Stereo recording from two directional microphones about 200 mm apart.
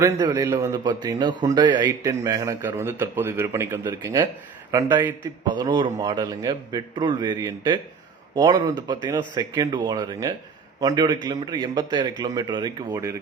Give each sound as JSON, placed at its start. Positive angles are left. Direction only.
{"t": 0.0, "sound": "a man's voice", "side_deg": -15}